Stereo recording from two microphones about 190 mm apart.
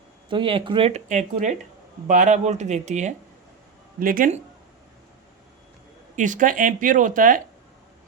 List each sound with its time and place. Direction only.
0.3 s speech: 25° right (ahead or behind); by 4.4 s 45° right (ahead or behind)
6.1 s speech: 40° right (ahead or behind)